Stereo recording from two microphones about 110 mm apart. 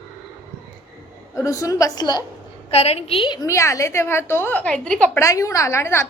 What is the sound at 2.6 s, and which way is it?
Speech, 70° left (ahead or behind).